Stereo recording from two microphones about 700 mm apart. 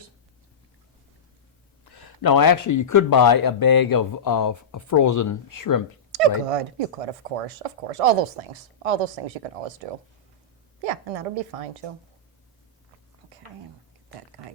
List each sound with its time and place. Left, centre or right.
1.8 s speech: left
6.1 s a woman's voice: right
14.4 s a sound: right